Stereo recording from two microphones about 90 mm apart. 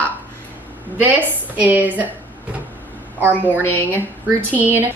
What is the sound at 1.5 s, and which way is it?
Speech, 15° right (ahead or behind).